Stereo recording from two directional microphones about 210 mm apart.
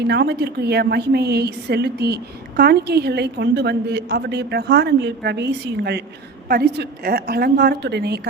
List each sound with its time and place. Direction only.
0.0 s a woman's voice: 55° right (ahead or behind)